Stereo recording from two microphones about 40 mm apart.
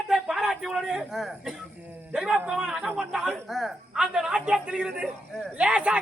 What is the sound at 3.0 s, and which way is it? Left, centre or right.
Speech, centre.